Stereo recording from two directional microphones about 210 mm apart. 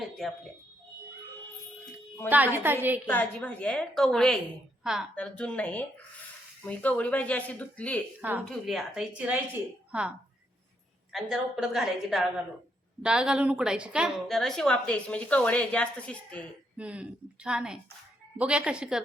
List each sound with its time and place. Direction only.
0.2 s a woman's voice: centre (ahead or behind)
2.3 s a woman's voice: 10° right (ahead or behind)
3.1 s a woman's voice: 5° left (ahead or behind)
8.2 s a woman's voice: 10° right (ahead or behind)
16.7 s a woman's voice: 5° right (ahead or behind)